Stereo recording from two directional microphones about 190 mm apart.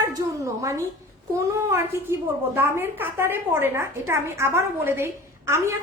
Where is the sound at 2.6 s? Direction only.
10° right (ahead or behind).